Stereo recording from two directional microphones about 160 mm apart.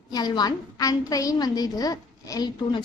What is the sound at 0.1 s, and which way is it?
A woman's voice, 25° left (ahead or behind).